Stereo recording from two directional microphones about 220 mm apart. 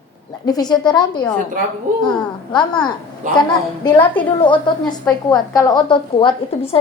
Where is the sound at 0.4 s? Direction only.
15° left (ahead or behind).